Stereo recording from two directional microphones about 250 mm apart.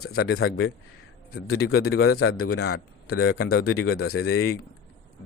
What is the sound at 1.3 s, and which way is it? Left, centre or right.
Speech, left.